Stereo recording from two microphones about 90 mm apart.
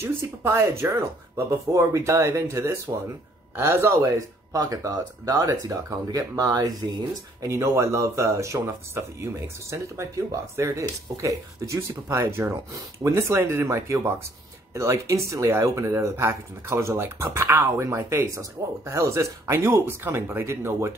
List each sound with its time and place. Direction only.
0.0 s speech: 30° right (ahead or behind); by 6.7 s 45° right (ahead or behind)
7.4 s speech: 35° right (ahead or behind)